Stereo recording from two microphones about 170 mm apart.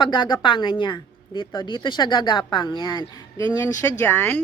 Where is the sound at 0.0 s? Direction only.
25° left (ahead or behind).